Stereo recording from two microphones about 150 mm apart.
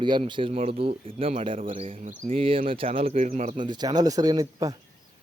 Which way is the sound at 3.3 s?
55° right (ahead or behind).